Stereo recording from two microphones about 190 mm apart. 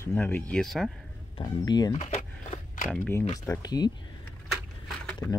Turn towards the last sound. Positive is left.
turn(degrees=10)  # may be behind; listen again after turning